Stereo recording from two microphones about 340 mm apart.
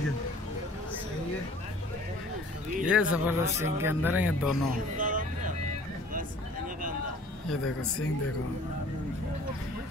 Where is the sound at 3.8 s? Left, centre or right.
Centre.